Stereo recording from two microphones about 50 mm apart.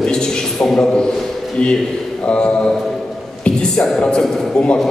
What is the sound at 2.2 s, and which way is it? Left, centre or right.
A man's voice, left.